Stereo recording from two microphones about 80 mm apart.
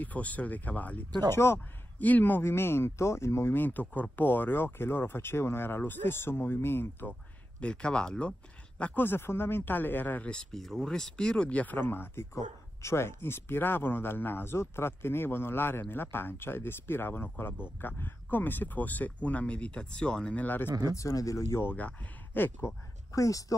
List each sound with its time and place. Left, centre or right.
0.0 s a man's voice: centre
1.3 s speech: left
2.0 s a man's voice: left
7.6 s speech: centre
8.9 s a man's voice: left
10.3 s a man's voice: centre; by 20.7 s left
20.9 s speech: left
21.7 s a man's voice: left
23.1 s speech: left